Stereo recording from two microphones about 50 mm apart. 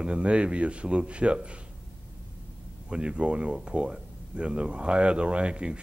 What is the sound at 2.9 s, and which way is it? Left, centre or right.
Speech, right.